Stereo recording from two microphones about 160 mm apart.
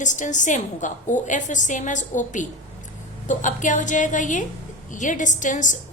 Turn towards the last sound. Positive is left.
turn(degrees=50)  # may be behind; listen again after turning